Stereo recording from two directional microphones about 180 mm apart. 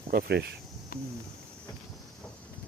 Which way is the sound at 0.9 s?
60° left (ahead or behind).